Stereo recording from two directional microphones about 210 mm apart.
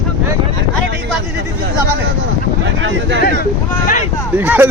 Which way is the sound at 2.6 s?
60° right (ahead or behind).